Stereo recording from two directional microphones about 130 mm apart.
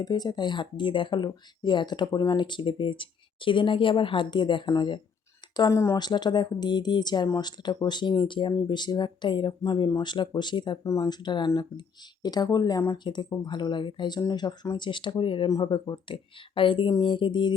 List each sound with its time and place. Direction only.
0.0 s speech: 30° left (ahead or behind)
5.5 s speech: 25° left (ahead or behind)
10.8 s speech: 25° left (ahead or behind)
11.2 s speech: 35° left (ahead or behind)